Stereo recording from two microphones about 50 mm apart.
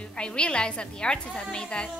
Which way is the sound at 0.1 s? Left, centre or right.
Centre.